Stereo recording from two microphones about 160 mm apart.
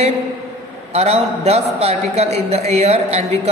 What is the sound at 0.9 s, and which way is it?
A man's voice, 40° right (ahead or behind).